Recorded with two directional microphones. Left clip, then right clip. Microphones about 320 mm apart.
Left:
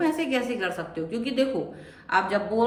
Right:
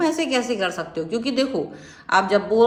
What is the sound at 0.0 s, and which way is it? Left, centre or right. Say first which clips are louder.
A woman's voice: right 4 dB; centre.